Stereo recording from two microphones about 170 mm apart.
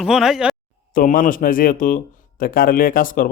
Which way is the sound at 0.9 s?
50° left (ahead or behind).